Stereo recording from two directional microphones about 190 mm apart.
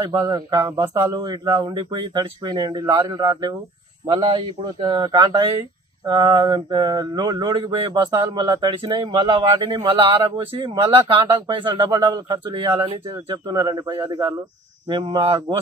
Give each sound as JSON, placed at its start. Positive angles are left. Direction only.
{"t": 0.0, "sound": "speech", "side_deg": -15}